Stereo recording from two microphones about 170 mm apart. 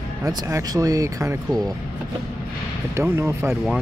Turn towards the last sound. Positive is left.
turn(degrees=-15)  # may be behind; listen again after turning